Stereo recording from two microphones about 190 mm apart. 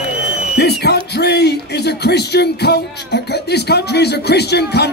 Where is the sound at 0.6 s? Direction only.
60° left (ahead or behind).